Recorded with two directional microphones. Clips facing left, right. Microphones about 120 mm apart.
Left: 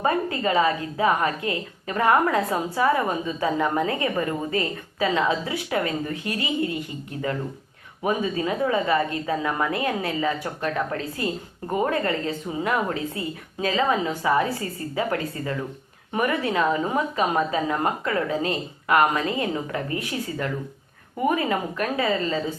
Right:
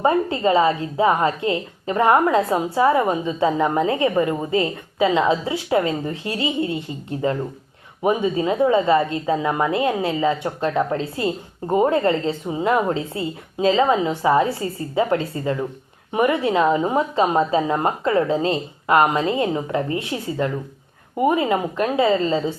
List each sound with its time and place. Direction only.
0.0 s a woman's voice: 25° right (ahead or behind)